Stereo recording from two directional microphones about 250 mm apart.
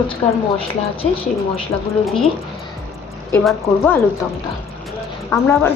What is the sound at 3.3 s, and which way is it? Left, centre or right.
Speech, centre.